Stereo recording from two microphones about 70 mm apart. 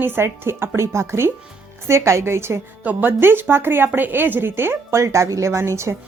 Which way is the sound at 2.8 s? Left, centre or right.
Right.